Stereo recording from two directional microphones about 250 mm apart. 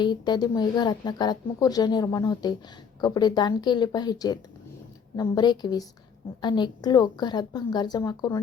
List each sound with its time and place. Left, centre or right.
0.0 s speech: centre